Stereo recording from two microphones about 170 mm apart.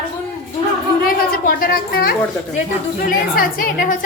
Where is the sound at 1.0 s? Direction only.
55° left (ahead or behind).